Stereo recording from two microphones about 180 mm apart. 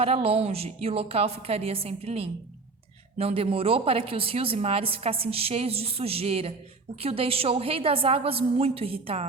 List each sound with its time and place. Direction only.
0.0 s a woman's voice: 35° right (ahead or behind)